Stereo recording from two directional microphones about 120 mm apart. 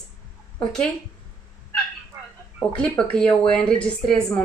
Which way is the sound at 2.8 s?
5° left (ahead or behind).